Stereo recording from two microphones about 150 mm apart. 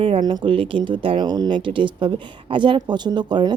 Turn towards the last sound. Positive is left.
turn(degrees=-30)  # may be behind; listen again after turning